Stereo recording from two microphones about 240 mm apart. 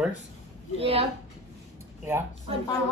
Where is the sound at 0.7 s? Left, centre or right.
Right.